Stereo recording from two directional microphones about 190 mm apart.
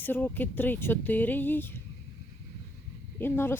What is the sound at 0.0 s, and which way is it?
Speech, 10° left (ahead or behind).